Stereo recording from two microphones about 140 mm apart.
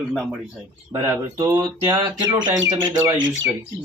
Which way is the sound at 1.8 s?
35° right (ahead or behind).